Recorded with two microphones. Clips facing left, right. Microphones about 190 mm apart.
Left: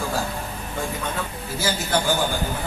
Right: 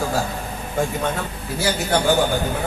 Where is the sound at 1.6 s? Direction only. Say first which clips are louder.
Right 3 dB; 60° right (ahead or behind).